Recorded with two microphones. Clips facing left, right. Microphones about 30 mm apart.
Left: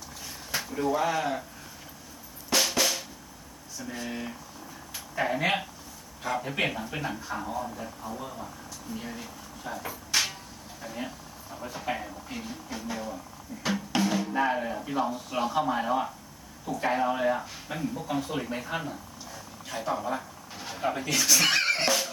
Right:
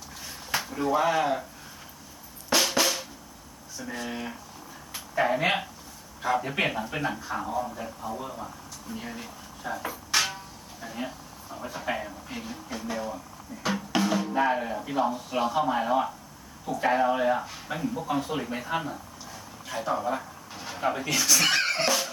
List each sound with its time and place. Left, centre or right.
0.6 s a sound: centre
0.9 s speech: centre
2.5 s drum: centre
4.0 s speech: centre
7.8 s speech: centre
19.6 s a sound: centre
21.1 s speech: centre